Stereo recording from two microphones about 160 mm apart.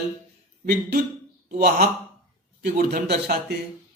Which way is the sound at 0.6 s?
55° right (ahead or behind).